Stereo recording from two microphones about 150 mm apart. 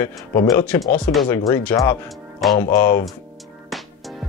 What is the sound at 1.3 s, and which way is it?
Speech, 15° left (ahead or behind).